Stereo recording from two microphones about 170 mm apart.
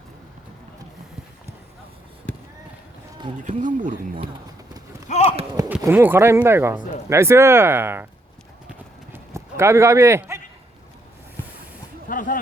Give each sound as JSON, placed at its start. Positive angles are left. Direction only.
{"t": 3.4, "sound": "speech", "side_deg": -50}
{"t": 5.0, "sound": "clip-clop", "side_deg": 40}
{"t": 5.8, "sound": "speech", "side_deg": -10}
{"t": 9.1, "sound": "clip-clop", "side_deg": -15}
{"t": 12.0, "sound": "a sound", "side_deg": 55}